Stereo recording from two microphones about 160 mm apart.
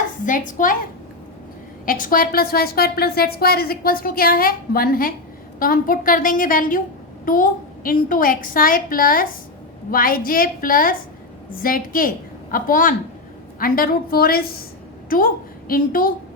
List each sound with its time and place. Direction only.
0.3 s a woman's voice: 55° left (ahead or behind)
1.8 s a woman's voice: 60° left (ahead or behind)